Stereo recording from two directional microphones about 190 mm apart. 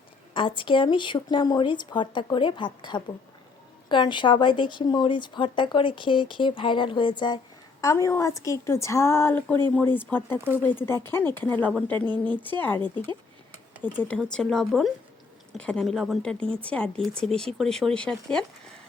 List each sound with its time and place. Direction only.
0.3 s a woman's voice: 25° left (ahead or behind); by 12.8 s 10° left (ahead or behind)
14.0 s speech: 5° left (ahead or behind)